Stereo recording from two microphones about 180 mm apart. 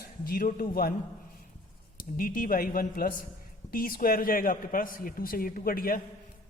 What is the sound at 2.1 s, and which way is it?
Speech, 50° left (ahead or behind).